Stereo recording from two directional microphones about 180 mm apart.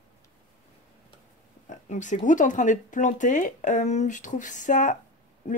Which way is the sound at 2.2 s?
45° left (ahead or behind).